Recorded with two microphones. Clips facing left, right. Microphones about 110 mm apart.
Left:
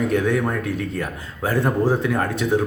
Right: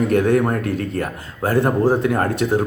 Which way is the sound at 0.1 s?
45° right (ahead or behind).